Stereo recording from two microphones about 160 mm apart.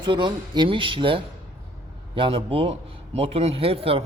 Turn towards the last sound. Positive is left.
turn(degrees=-35)  # may be behind; listen again after turning